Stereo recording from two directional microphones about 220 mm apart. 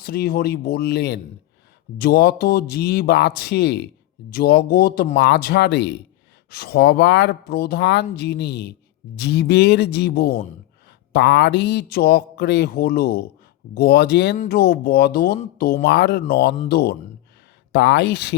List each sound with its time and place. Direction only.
0.0 s speech: 45° left (ahead or behind)